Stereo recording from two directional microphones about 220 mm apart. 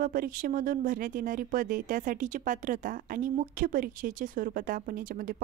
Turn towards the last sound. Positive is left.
turn(degrees=-40)  # may be behind; listen again after turning